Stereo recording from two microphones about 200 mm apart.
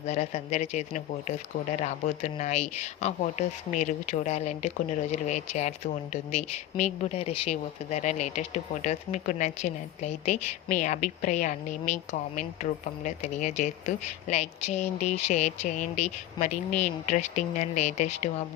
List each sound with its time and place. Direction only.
0.0 s speech: 35° left (ahead or behind)